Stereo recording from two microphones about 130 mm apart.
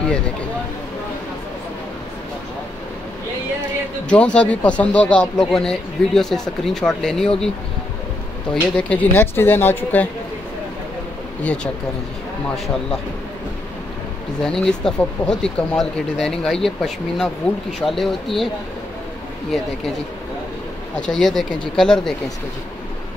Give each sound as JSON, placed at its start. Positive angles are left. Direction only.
{"t": 4.1, "sound": "speech", "side_deg": 10}
{"t": 8.7, "sound": "speech", "side_deg": 10}
{"t": 11.4, "sound": "speech", "side_deg": 5}
{"t": 14.4, "sound": "speech", "side_deg": 5}
{"t": 21.0, "sound": "speech", "side_deg": 5}